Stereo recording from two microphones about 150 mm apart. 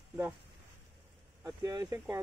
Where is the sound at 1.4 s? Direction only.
20° right (ahead or behind).